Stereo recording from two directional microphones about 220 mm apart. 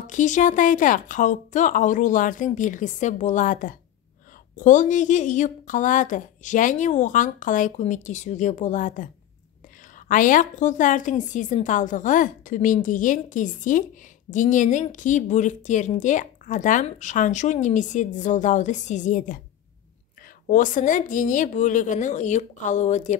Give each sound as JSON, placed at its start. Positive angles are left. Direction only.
{"t": 0.0, "sound": "a woman's voice", "side_deg": 35}
{"t": 20.4, "sound": "a woman's voice", "side_deg": 35}